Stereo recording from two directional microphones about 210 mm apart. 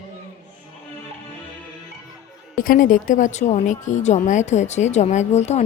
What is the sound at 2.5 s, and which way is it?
A woman's voice, 40° left (ahead or behind).